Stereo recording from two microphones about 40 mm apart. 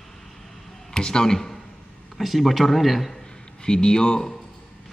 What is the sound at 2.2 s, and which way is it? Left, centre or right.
Speech, centre.